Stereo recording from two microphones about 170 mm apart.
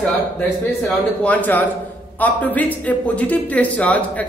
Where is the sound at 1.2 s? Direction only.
10° left (ahead or behind).